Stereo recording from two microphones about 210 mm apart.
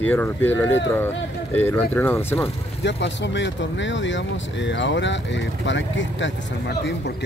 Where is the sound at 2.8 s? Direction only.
55° left (ahead or behind).